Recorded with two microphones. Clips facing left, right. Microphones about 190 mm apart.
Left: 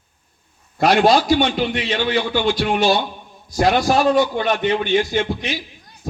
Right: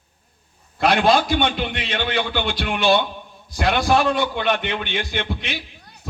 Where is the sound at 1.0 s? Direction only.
55° right (ahead or behind).